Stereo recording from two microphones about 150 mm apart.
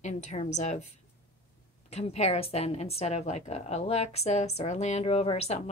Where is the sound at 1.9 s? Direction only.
45° left (ahead or behind).